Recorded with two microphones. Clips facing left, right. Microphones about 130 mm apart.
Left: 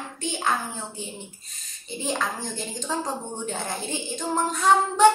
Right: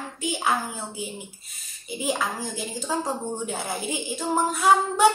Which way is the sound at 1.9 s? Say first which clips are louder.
Right 1 dB; 10° right (ahead or behind).